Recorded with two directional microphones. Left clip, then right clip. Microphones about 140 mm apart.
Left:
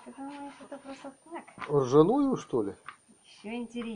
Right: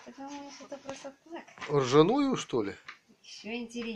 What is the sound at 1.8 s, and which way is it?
Speech, 15° left (ahead or behind).